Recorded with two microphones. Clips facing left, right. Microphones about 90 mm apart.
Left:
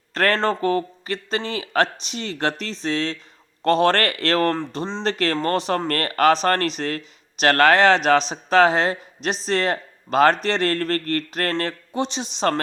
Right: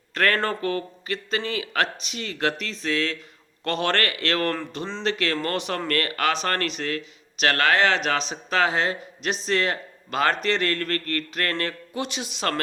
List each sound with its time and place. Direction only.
0.1 s a man's voice: 35° left (ahead or behind)